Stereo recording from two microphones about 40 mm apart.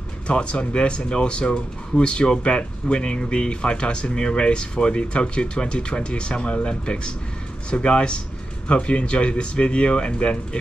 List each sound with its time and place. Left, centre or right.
0.3 s speech: left